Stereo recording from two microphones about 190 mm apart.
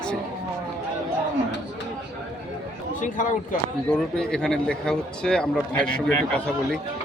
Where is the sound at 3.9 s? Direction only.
5° left (ahead or behind).